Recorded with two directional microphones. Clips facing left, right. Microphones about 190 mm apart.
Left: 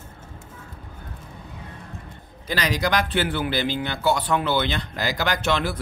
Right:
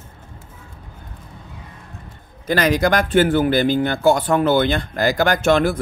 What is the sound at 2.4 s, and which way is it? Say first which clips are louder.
A man's voice: right 7 dB; 50° right (ahead or behind).